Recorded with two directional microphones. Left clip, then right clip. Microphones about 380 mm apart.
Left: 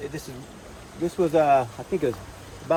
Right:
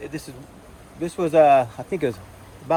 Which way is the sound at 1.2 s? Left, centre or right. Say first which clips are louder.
Right 4 dB; right.